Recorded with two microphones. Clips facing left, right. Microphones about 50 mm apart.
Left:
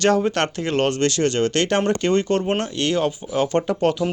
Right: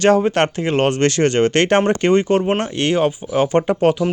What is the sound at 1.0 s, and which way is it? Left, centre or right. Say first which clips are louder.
Speech: right 4 dB; right.